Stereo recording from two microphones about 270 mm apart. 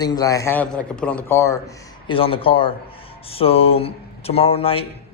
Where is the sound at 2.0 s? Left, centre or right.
Centre.